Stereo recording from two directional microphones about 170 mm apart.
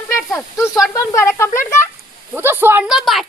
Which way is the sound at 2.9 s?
Centre (ahead or behind).